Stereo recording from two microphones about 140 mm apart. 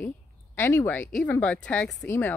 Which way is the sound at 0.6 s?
15° left (ahead or behind).